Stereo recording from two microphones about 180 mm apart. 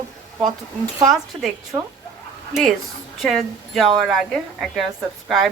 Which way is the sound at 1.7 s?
20° right (ahead or behind).